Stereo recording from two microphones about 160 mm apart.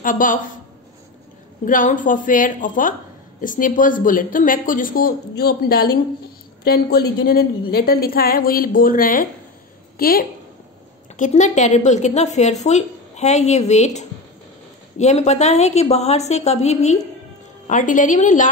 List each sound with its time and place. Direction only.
0.0 s speech: 55° left (ahead or behind)
1.6 s a woman's voice: 55° left (ahead or behind)
11.1 s a woman's voice: 50° left (ahead or behind)